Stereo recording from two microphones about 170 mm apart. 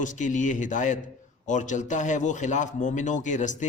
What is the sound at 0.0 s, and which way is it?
Speech, 50° left (ahead or behind).